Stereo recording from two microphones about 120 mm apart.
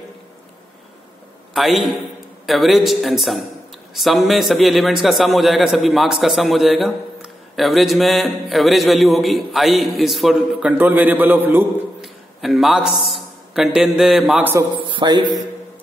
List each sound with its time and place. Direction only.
1.5 s a man's voice: centre (ahead or behind); by 11.6 s 15° right (ahead or behind)
12.0 s a sound: centre (ahead or behind)
13.6 s a man's voice: 5° right (ahead or behind)
14.4 s a man's voice: 20° right (ahead or behind)
14.8 s speech: 40° right (ahead or behind)